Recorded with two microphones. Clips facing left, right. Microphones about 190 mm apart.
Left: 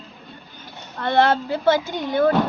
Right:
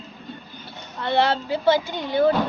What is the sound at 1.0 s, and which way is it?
Speech, 50° left (ahead or behind).